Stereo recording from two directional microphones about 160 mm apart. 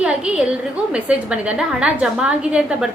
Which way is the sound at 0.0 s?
5° right (ahead or behind).